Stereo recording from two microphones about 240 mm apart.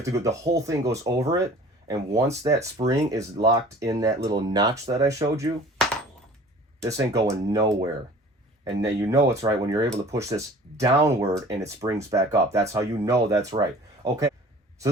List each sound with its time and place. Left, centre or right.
0.0 s speech: centre
6.8 s speech: centre